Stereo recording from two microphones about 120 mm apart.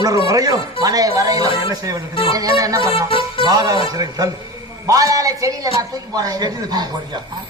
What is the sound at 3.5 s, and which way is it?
A man's voice, 35° right (ahead or behind).